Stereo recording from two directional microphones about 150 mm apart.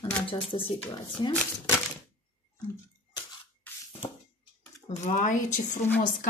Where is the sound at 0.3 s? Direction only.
35° left (ahead or behind).